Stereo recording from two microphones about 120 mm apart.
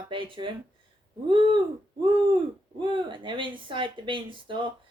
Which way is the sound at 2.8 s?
45° right (ahead or behind).